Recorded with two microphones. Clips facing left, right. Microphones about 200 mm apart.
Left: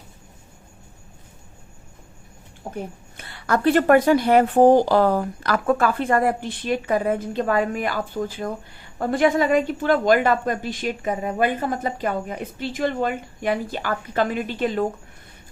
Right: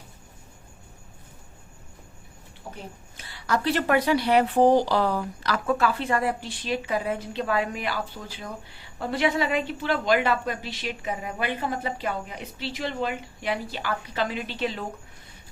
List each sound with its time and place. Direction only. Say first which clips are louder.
2.6 s a woman's voice: left 8 dB; 55° left (ahead or behind)